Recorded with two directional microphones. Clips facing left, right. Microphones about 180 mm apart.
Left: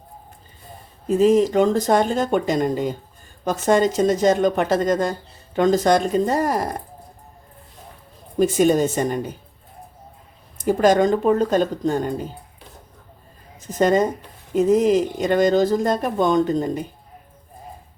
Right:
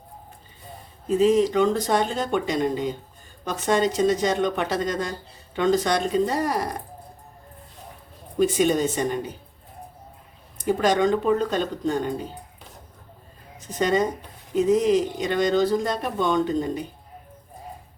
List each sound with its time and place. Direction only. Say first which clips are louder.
1.0 s speech: left 3 dB; 45° left (ahead or behind)
8.4 s speech: left 4 dB; 45° left (ahead or behind)
10.7 s speech: left 4 dB; 45° left (ahead or behind)
13.7 s speech: left 4 dB; 45° left (ahead or behind)